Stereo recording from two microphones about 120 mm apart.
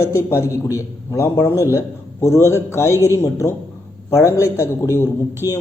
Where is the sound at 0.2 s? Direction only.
20° left (ahead or behind).